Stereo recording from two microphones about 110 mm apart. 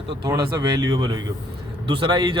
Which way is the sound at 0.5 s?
45° right (ahead or behind).